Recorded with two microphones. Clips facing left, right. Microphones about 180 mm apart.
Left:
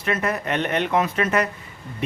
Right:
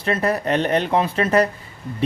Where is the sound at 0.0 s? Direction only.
35° right (ahead or behind).